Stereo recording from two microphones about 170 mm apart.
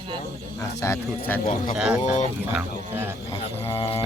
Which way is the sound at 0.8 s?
15° left (ahead or behind).